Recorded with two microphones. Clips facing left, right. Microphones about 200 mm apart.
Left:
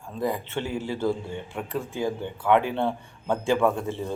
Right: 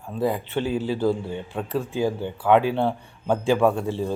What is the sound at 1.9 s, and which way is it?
A man's voice, 15° right (ahead or behind).